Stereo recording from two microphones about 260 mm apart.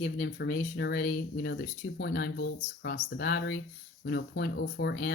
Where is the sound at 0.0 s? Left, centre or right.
Left.